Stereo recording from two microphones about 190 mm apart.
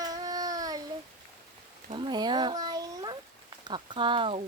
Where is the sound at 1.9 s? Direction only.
25° right (ahead or behind).